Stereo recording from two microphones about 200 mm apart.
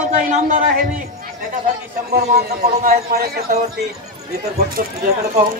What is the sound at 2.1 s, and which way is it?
A man's voice, 50° right (ahead or behind).